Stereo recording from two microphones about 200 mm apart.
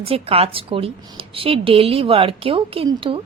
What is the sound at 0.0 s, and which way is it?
Speech, 30° right (ahead or behind).